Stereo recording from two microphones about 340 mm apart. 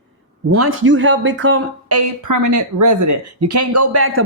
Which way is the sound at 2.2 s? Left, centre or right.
Right.